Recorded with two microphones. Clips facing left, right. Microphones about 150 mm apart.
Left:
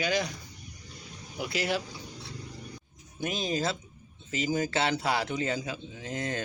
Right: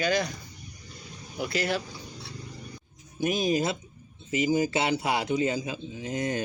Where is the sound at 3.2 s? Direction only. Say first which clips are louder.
Right 5 dB; 20° right (ahead or behind).